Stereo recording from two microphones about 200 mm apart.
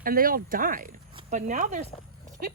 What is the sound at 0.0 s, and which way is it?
Speech, 45° right (ahead or behind).